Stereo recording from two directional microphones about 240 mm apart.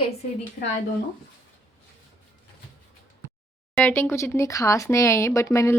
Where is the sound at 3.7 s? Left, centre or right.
Centre.